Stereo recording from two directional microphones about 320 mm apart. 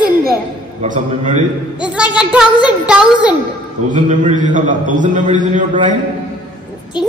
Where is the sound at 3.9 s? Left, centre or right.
Right.